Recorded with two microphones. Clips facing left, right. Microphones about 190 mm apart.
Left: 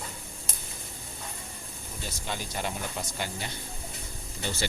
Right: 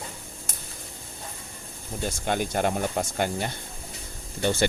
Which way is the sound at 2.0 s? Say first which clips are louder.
Right 10 dB; 55° right (ahead or behind).